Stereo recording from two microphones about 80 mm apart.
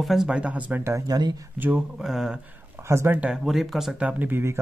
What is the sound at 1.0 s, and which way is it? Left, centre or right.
Speech, right.